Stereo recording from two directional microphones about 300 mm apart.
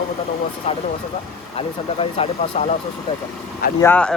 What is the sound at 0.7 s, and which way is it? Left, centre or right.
Speech, left.